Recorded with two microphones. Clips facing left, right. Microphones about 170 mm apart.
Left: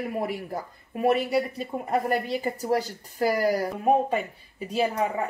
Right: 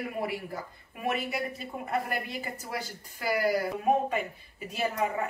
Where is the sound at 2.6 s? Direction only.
40° left (ahead or behind).